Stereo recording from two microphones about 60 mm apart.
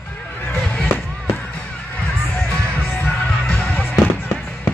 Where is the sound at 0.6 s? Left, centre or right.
Left.